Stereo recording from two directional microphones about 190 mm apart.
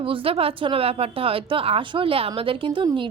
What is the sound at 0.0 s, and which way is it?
A woman's voice, 30° right (ahead or behind).